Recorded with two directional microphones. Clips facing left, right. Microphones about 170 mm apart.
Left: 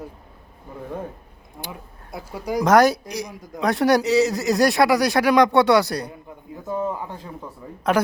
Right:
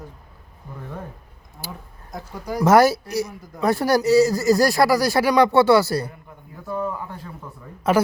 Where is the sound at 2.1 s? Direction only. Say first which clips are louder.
Left 3 dB; 10° left (ahead or behind).